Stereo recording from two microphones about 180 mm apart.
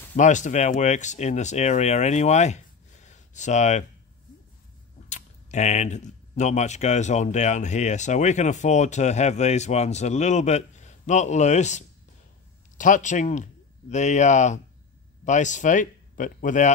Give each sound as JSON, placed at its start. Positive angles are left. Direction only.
{"t": 0.1, "sound": "speech", "side_deg": 45}
{"t": 5.1, "sound": "speech", "side_deg": 40}